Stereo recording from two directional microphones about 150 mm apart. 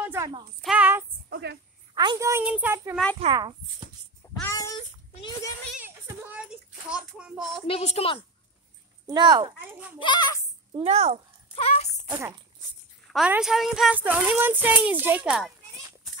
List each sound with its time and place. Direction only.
0.0 s a sound: 15° right (ahead or behind)
0.6 s child singing: 5° right (ahead or behind)
2.0 s a woman's voice: 25° right (ahead or behind)
3.2 s a child's voice: 45° right (ahead or behind)
4.5 s a sound: 20° left (ahead or behind)
5.8 s child singing: 10° right (ahead or behind)
7.6 s a woman's voice: 40° left (ahead or behind)
9.0 s speech: 30° right (ahead or behind)
9.7 s a woman's voice: 10° right (ahead or behind)
9.9 s a child's voice: 30° left (ahead or behind)
10.7 s a child's voice: 40° right (ahead or behind)
11.5 s speech: 45° left (ahead or behind)
13.1 s a woman's voice: 5° right (ahead or behind)